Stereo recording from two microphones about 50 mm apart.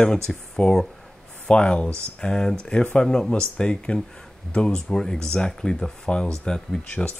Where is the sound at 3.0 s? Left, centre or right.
Centre.